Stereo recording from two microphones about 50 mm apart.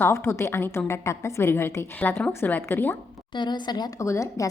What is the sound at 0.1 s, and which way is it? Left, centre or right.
A woman's voice, left.